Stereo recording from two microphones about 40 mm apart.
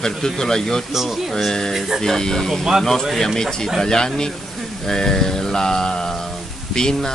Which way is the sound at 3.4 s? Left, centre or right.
Centre.